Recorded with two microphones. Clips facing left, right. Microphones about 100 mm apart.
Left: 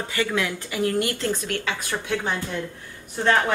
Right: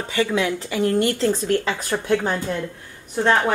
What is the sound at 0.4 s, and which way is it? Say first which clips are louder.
Speech: right 4 dB; 30° right (ahead or behind).